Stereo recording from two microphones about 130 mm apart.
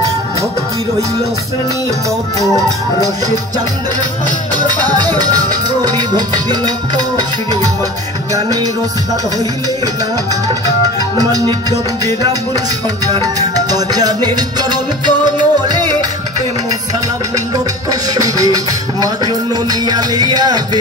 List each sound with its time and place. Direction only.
4.6 s music: 35° right (ahead or behind)
8.3 s music: 30° right (ahead or behind)
11.0 s music: 30° right (ahead or behind)
13.1 s music: 30° right (ahead or behind)
18.1 s music: 30° right (ahead or behind)